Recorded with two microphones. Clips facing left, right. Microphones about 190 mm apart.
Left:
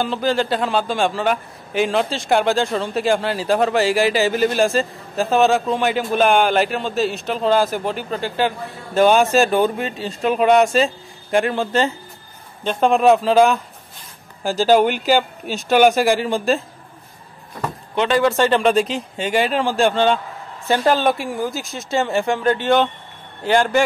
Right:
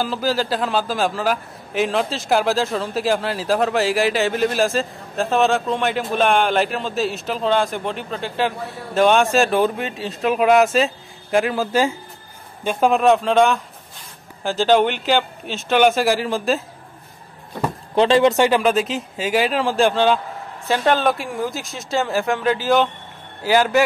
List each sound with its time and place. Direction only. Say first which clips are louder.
0.0 s a man's voice: left 2 dB; 5° right (ahead or behind)
14.6 s a man's voice: left 1 dB; 5° left (ahead or behind)
17.9 s speech: right 3 dB; 30° right (ahead or behind)
18.6 s a man's voice: left 2 dB; centre (ahead or behind)